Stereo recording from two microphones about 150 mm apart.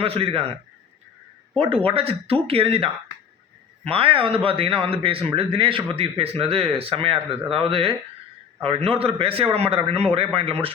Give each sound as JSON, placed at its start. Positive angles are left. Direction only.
{"t": 0.0, "sound": "a man's voice", "side_deg": -40}
{"t": 1.5, "sound": "a man's voice", "side_deg": -40}